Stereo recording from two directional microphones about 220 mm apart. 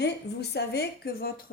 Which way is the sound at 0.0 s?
50° left (ahead or behind).